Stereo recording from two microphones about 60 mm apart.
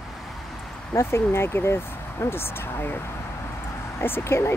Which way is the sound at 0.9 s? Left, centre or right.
Left.